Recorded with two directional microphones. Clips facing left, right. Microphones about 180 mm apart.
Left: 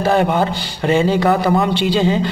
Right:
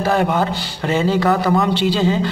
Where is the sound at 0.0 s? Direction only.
20° left (ahead or behind).